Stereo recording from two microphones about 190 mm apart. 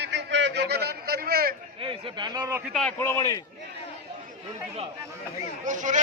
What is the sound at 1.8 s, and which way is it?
Speech, 30° right (ahead or behind).